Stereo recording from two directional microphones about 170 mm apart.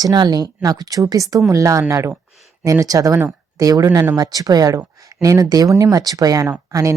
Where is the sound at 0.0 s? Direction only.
25° right (ahead or behind).